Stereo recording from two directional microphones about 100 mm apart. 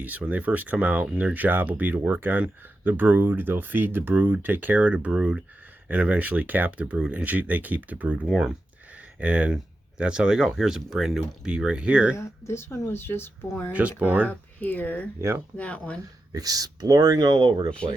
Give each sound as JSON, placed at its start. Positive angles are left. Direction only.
{"t": 0.0, "sound": "speech", "side_deg": -15}
{"t": 8.3, "sound": "speech", "side_deg": -5}
{"t": 9.1, "sound": "speech", "side_deg": -15}
{"t": 12.1, "sound": "speech", "side_deg": 30}
{"t": 14.0, "sound": "speech", "side_deg": -15}
{"t": 14.3, "sound": "speech", "side_deg": 15}
{"t": 16.3, "sound": "speech", "side_deg": -40}